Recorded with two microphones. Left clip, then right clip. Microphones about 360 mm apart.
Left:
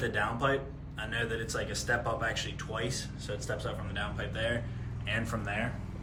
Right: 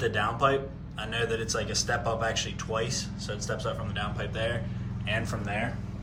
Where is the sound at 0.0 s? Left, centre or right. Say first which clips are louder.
Right 5 dB; centre.